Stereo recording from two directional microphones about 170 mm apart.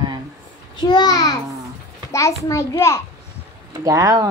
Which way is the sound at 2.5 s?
15° left (ahead or behind).